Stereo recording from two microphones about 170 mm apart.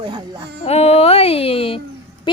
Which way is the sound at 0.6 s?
40° left (ahead or behind).